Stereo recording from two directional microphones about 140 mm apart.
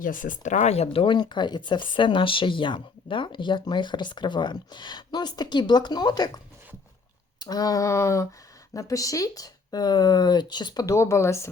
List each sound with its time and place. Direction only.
0.0 s speech: 75° left (ahead or behind); by 11.4 s 20° left (ahead or behind)